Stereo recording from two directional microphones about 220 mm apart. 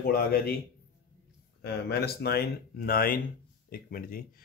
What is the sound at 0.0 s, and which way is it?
Speech, 45° left (ahead or behind).